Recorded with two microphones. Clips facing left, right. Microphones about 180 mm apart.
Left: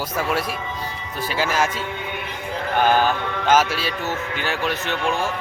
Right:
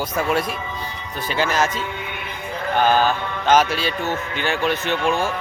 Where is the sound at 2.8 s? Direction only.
15° left (ahead or behind).